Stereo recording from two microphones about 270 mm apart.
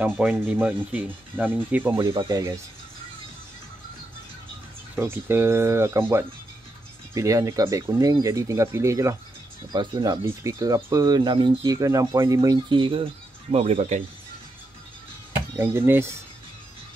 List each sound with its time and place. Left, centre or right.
0.0 s speech: centre
4.9 s speech: centre; by 14.0 s right
15.5 s speech: centre